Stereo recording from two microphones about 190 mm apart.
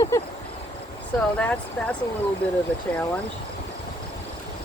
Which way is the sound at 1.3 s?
5° left (ahead or behind).